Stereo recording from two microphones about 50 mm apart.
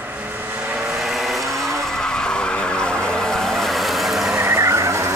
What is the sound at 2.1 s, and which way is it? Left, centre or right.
Vehicle, centre.